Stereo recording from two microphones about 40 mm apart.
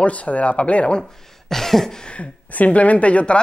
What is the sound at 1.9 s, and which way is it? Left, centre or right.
Speech, left.